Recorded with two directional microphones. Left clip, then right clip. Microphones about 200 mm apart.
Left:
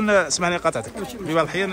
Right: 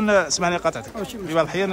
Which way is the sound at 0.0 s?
15° right (ahead or behind).